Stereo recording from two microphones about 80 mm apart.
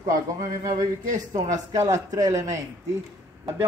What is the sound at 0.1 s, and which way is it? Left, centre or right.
Speech, right.